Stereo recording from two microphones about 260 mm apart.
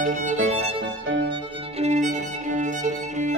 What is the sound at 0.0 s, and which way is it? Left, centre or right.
Music, right.